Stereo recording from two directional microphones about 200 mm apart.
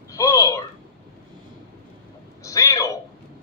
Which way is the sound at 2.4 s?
15° left (ahead or behind).